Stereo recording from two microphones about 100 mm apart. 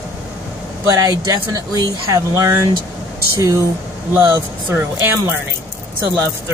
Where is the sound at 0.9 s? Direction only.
35° right (ahead or behind).